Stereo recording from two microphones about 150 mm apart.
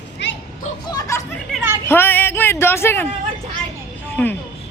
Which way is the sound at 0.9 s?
20° left (ahead or behind).